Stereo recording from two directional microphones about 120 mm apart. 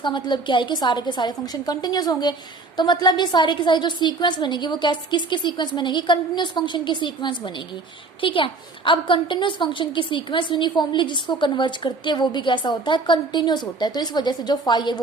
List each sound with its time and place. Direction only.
0.0 s a woman's voice: 40° left (ahead or behind)